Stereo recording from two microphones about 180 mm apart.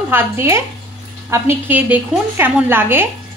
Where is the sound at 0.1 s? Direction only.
15° right (ahead or behind).